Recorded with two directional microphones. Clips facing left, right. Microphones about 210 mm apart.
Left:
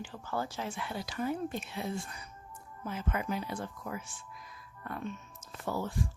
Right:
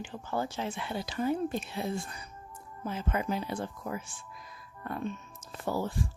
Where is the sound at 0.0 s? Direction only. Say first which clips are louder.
Right 3 dB; 20° right (ahead or behind).